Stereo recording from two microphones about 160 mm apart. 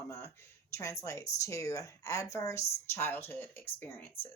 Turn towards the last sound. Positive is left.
turn(degrees=10)  # may be behind; listen again after turning